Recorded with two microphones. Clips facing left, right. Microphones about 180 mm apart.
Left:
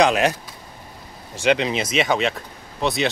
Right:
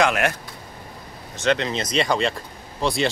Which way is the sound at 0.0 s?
20° left (ahead or behind).